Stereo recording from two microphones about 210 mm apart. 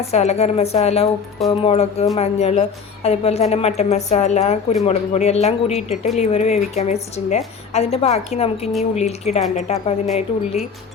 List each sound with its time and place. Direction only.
0.0 s a woman's voice: 30° left (ahead or behind)